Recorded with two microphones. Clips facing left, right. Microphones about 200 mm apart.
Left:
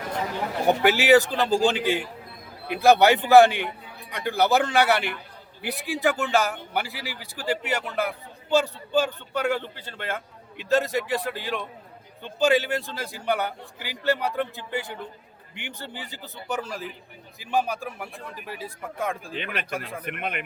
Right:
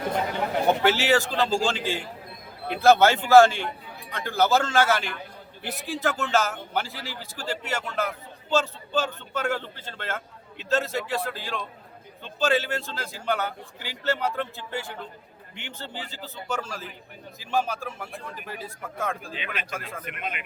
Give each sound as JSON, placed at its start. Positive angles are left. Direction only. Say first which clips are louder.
{"t": 0.7, "sound": "a man's voice", "louder": "left 5 dB", "side_deg": 15}
{"t": 19.3, "sound": "speech", "louder": "left 3 dB", "side_deg": 55}
{"t": 19.7, "sound": "a man's voice", "louder": "left 3 dB", "side_deg": 15}
{"t": 20.1, "sound": "speech", "louder": "left 4 dB", "side_deg": 60}